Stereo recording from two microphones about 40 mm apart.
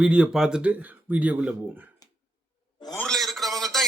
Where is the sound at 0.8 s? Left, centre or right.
Right.